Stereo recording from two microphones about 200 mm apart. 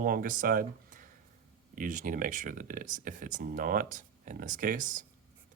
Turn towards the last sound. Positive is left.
turn(degrees=-40)  # may be behind; listen again after turning